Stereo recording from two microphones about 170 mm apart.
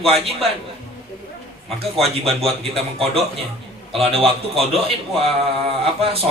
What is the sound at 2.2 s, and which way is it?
A man's voice, 35° right (ahead or behind).